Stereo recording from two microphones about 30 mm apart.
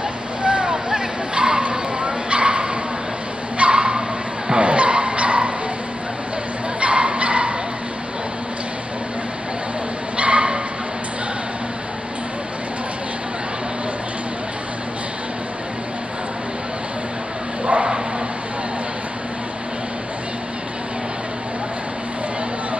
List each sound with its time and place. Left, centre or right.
0.4 s a sound: right
3.5 s bow-wow: right
4.6 s vehicle: right
6.8 s dog: right
10.1 s dog: right